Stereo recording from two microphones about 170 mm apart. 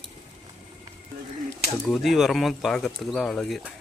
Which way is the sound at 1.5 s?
5° left (ahead or behind).